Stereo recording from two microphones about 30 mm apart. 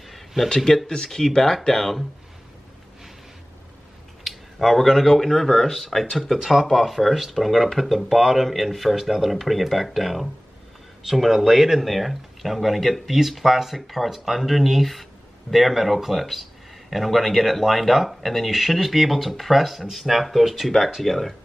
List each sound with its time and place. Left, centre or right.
0.1 s a sound: centre
0.8 s speech: left
4.2 s a sound: centre
5.2 s speech: centre
6.4 s speech: centre
8.2 s a man's voice: centre
8.5 s speech: centre